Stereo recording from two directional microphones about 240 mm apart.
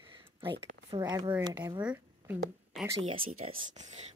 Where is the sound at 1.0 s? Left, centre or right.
Centre.